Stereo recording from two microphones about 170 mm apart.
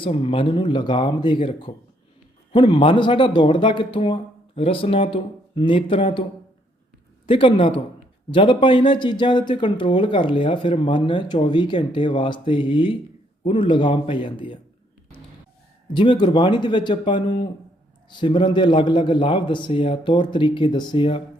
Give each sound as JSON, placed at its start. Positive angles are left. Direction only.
{"t": 0.0, "sound": "speech", "side_deg": 35}
{"t": 7.3, "sound": "speech", "side_deg": 30}
{"t": 15.9, "sound": "speech", "side_deg": 30}